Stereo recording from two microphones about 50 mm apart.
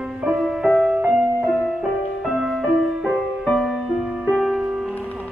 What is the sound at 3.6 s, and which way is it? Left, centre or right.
Music, centre.